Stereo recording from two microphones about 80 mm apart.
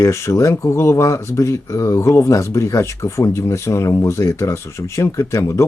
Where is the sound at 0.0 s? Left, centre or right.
Left.